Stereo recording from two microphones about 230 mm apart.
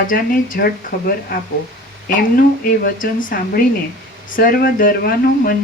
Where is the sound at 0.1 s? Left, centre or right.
Left.